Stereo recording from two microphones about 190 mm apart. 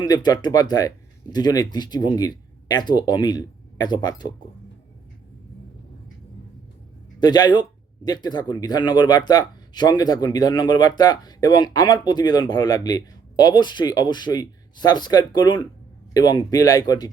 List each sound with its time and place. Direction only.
0.0 s speech: 20° left (ahead or behind)
7.2 s speech: 20° left (ahead or behind)